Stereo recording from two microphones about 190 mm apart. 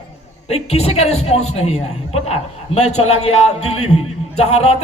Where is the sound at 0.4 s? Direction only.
35° left (ahead or behind).